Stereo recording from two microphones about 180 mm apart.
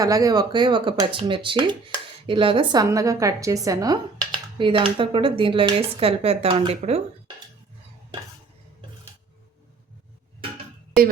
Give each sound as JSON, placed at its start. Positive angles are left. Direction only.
{"t": 0.0, "sound": "speech", "side_deg": -20}